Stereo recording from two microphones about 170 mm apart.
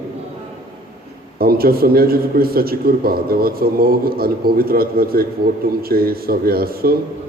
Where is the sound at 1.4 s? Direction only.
60° right (ahead or behind).